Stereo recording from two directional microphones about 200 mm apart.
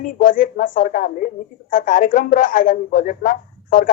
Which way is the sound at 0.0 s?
45° left (ahead or behind).